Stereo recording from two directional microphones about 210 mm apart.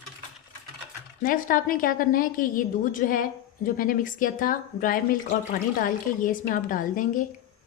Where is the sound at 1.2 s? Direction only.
40° left (ahead or behind).